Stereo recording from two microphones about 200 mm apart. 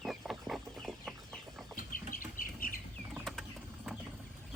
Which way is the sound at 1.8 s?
45° left (ahead or behind).